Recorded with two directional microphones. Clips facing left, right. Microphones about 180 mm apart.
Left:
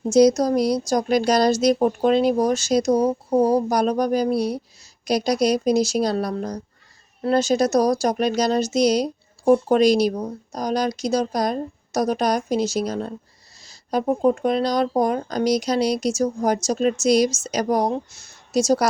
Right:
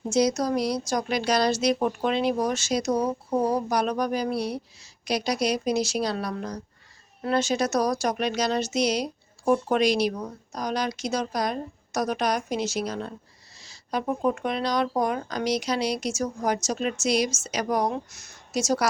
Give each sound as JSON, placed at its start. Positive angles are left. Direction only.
{"t": 0.1, "sound": "a woman's voice", "side_deg": 40}